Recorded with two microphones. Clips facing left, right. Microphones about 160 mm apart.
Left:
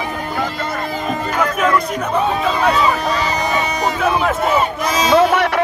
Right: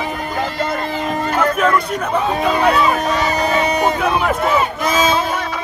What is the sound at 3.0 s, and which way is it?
Speech, 50° right (ahead or behind).